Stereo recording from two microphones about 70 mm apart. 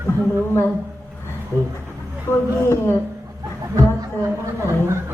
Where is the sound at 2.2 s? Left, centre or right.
Left.